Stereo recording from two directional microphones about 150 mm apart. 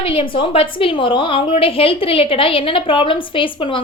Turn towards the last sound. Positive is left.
turn(degrees=35)  # may be behind; listen again after turning